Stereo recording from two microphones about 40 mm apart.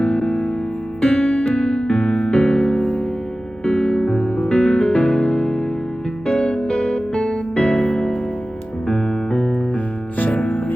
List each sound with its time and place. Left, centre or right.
0.0 s music: left